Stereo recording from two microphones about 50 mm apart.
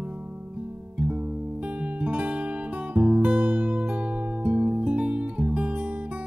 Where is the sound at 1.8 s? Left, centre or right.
Right.